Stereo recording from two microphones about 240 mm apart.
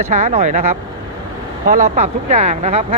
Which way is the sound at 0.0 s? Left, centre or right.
Right.